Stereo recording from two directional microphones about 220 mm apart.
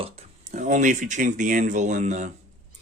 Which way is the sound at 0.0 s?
30° right (ahead or behind).